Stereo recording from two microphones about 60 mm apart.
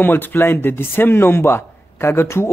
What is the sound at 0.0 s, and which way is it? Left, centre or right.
A man's voice, left.